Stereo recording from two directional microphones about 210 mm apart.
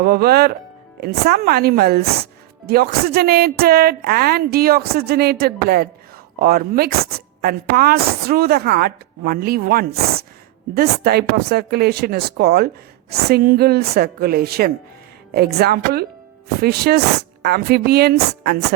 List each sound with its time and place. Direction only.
0.0 s speech: 45° right (ahead or behind)